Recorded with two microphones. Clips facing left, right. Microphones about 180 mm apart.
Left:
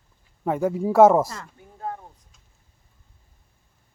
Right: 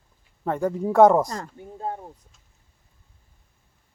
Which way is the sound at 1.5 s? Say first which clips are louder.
Right 2 dB; 25° right (ahead or behind).